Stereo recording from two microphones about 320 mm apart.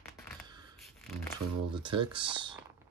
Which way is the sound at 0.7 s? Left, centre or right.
Centre.